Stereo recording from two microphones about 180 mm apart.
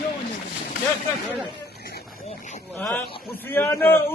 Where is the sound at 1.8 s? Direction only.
60° left (ahead or behind).